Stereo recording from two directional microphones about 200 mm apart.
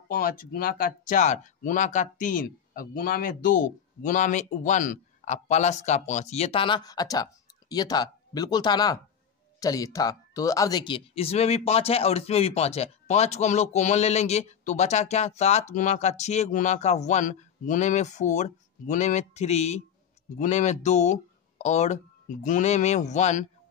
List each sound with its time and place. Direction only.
0.1 s speech: 50° left (ahead or behind)